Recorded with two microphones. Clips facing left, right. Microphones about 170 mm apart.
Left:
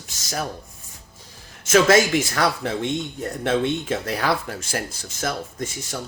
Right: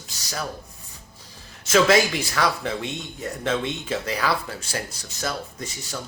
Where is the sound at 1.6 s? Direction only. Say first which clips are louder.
Left 2 dB; 45° left (ahead or behind).